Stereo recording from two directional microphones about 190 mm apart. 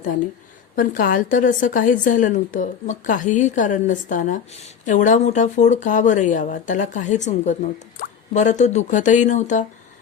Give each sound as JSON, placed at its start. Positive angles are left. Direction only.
{"t": 0.8, "sound": "a woman's voice", "side_deg": 50}